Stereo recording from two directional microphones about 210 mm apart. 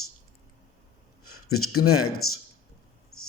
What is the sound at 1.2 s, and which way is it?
Speech, 90° left.